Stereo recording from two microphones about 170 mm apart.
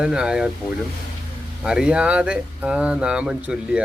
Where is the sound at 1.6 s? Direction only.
5° right (ahead or behind).